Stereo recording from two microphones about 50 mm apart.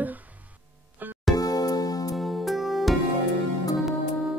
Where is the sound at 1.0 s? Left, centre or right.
Right.